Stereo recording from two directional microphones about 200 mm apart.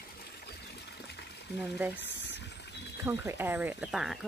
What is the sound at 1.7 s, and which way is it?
Speech, 10° right (ahead or behind).